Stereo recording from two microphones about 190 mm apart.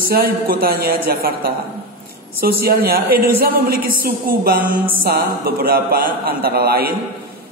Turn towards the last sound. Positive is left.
turn(degrees=-55)  # may be behind; listen again after turning